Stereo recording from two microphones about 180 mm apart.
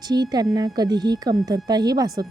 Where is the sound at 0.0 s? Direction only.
20° right (ahead or behind).